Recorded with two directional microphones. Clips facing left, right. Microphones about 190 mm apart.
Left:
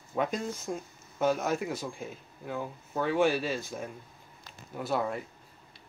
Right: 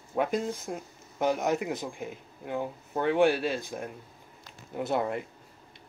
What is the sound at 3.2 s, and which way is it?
Speech, 60° right (ahead or behind).